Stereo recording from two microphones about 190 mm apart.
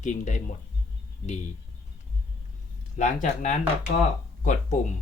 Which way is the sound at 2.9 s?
40° left (ahead or behind).